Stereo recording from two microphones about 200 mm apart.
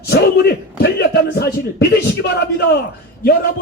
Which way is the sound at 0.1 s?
55° left (ahead or behind).